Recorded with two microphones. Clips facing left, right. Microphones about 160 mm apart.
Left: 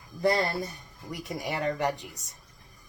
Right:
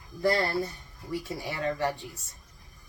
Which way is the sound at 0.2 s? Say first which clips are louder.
Even; 20° left (ahead or behind).